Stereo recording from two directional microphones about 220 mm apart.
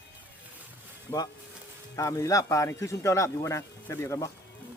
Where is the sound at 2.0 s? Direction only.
15° left (ahead or behind).